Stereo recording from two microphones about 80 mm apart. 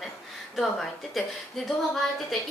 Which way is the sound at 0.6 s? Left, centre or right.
Centre.